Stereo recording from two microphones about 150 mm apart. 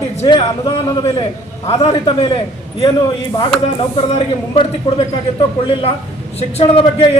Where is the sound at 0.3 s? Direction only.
25° left (ahead or behind).